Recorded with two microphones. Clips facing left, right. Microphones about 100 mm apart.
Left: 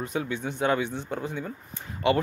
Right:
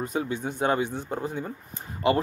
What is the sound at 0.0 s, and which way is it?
Speech, 40° right (ahead or behind).